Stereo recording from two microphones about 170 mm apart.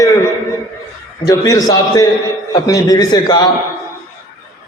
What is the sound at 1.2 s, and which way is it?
A man's voice, 20° left (ahead or behind).